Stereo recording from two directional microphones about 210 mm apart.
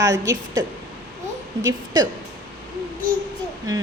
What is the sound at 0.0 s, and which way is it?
Speech, 15° right (ahead or behind).